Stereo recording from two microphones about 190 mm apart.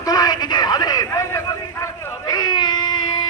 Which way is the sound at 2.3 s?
20° left (ahead or behind).